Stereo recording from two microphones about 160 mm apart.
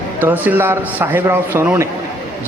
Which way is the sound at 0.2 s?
10° right (ahead or behind).